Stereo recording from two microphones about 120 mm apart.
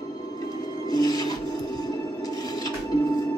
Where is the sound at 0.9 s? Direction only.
35° left (ahead or behind).